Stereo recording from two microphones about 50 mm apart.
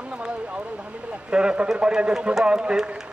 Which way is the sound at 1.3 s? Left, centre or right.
Centre.